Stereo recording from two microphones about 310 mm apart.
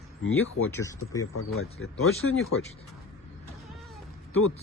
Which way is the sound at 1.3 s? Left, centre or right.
Left.